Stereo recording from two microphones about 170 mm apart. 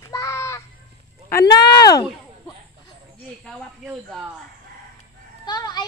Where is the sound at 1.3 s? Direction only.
20° left (ahead or behind).